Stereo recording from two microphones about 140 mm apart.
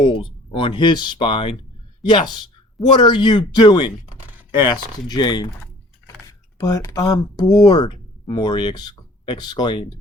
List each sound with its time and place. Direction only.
0.0 s speech: 40° left (ahead or behind)